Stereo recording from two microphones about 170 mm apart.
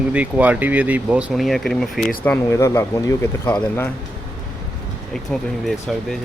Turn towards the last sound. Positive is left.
turn(degrees=0)  # may be behind; listen again after turning